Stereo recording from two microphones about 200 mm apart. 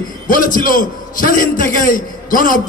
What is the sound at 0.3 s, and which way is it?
A man's voice, 45° left (ahead or behind).